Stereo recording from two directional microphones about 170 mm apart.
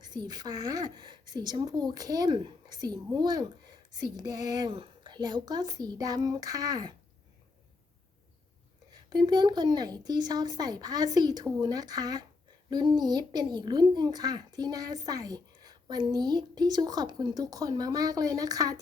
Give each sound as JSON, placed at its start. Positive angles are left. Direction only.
{"t": 0.0, "sound": "speech", "side_deg": -25}
{"t": 9.0, "sound": "speech", "side_deg": -25}